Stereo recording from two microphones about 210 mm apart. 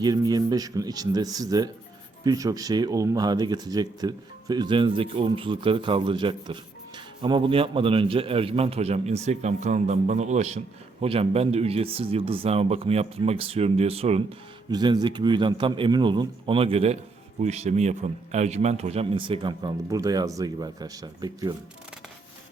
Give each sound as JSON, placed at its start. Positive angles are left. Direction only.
{"t": 0.0, "sound": "speech", "side_deg": -20}